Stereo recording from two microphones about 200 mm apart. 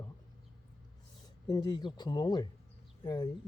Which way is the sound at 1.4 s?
20° left (ahead or behind).